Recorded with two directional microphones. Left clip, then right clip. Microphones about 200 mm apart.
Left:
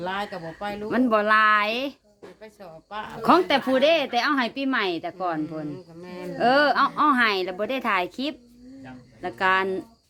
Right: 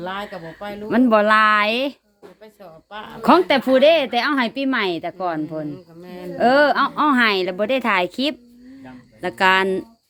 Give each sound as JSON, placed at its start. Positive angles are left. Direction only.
{"t": 0.0, "sound": "speech", "side_deg": 15}
{"t": 0.9, "sound": "a woman's voice", "side_deg": -35}
{"t": 2.4, "sound": "speech", "side_deg": 15}
{"t": 3.2, "sound": "a woman's voice", "side_deg": -35}
{"t": 6.0, "sound": "speech", "side_deg": 15}
{"t": 6.3, "sound": "a woman's voice", "side_deg": -30}